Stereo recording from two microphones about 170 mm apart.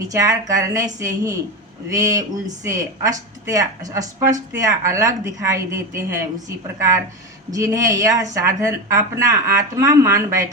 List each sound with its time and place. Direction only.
0.1 s a woman's voice: 20° right (ahead or behind)
7.5 s speech: 20° right (ahead or behind)